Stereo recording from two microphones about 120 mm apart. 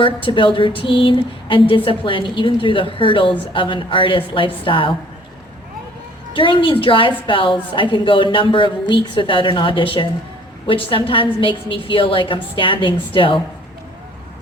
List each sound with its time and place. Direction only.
0.0 s speech: 45° left (ahead or behind)
6.3 s speech: 45° left (ahead or behind)